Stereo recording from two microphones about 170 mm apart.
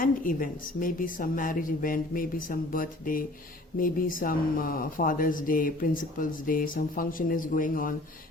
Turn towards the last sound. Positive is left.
turn(degrees=55)  # may be behind; listen again after turning